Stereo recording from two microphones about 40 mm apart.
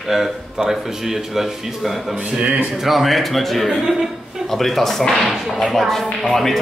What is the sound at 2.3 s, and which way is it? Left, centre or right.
Speech, right.